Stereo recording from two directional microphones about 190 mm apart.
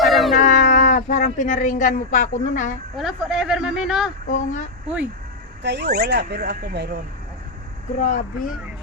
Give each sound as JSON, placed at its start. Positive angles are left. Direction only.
{"t": 0.0, "sound": "a sound", "side_deg": 0}
{"t": 0.3, "sound": "a woman's voice", "side_deg": 45}
{"t": 2.9, "sound": "speech", "side_deg": 0}
{"t": 4.3, "sound": "speech", "side_deg": 40}
{"t": 5.6, "sound": "speech", "side_deg": -60}
{"t": 7.9, "sound": "speech", "side_deg": 45}